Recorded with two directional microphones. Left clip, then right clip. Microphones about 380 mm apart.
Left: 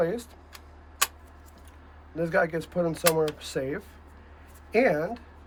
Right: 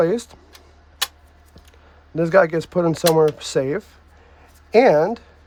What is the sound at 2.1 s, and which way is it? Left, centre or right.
Speech, centre.